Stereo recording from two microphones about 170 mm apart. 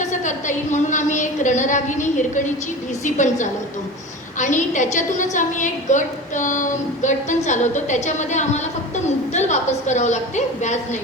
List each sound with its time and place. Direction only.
0.0 s a woman's voice: 45° left (ahead or behind)